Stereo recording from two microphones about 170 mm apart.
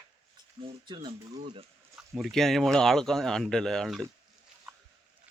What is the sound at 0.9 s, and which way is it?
Speech, 25° right (ahead or behind).